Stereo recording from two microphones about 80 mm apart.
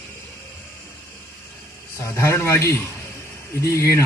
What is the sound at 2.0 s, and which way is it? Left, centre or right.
A man's voice, left.